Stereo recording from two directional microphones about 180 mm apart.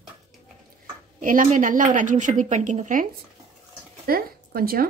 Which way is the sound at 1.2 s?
45° right (ahead or behind).